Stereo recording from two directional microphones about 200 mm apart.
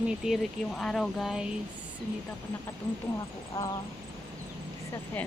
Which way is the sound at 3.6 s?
15° left (ahead or behind).